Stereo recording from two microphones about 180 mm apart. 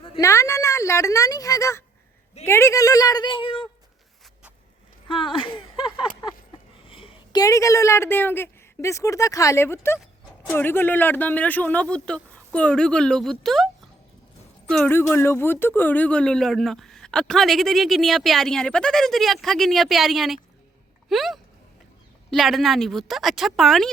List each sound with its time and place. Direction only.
0.2 s a woman's voice: 15° left (ahead or behind)
5.0 s a woman's voice: 30° left (ahead or behind); by 13.7 s centre (ahead or behind)
14.7 s speech: 5° left (ahead or behind)